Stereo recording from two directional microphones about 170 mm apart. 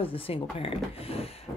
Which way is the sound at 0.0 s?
35° left (ahead or behind).